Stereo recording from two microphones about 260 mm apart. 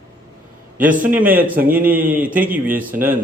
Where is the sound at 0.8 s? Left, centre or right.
Right.